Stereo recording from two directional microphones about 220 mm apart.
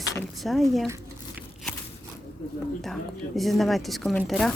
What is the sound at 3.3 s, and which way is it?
Speech, centre (ahead or behind).